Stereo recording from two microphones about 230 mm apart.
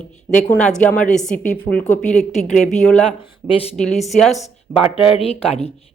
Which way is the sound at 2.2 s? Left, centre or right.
Left.